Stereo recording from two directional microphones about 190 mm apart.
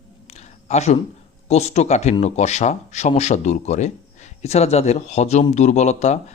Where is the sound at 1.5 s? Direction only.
35° left (ahead or behind).